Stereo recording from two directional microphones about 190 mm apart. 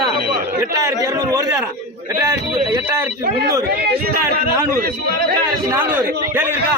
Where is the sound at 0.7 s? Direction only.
15° right (ahead or behind).